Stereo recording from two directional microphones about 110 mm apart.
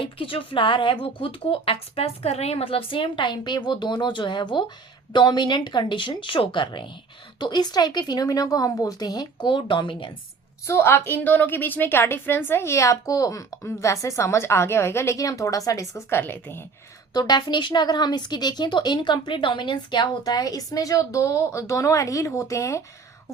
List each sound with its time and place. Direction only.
0.0 s speech: 55° left (ahead or behind)
10.7 s a woman's voice: 20° left (ahead or behind)
17.2 s speech: 40° left (ahead or behind)